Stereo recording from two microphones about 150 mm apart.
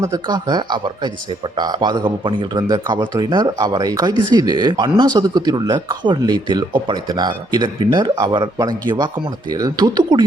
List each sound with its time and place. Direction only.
0.0 s speech: 25° right (ahead or behind)